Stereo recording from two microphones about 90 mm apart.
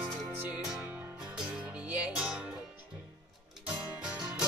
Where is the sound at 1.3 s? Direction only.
15° right (ahead or behind).